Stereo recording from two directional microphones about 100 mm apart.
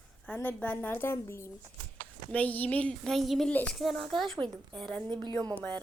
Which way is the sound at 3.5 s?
10° left (ahead or behind).